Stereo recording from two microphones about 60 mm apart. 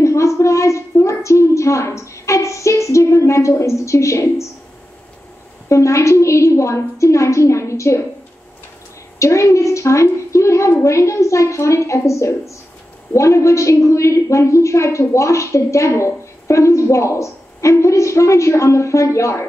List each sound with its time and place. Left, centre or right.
0.0 s a sound: left
5.7 s a woman's voice: left
9.2 s a woman's voice: left